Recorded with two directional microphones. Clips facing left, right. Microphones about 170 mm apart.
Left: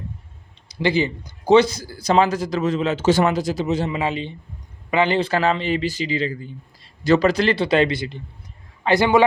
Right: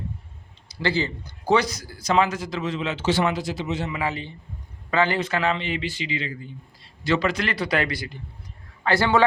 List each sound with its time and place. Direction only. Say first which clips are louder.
0.7 s speech: left 5 dB; 15° left (ahead or behind); by 3.9 s 40° left (ahead or behind)
3.9 s a man's voice: left 4 dB; 20° left (ahead or behind)
5.2 s a man's voice: left 4 dB; 35° left (ahead or behind); by 9.2 s 15° left (ahead or behind)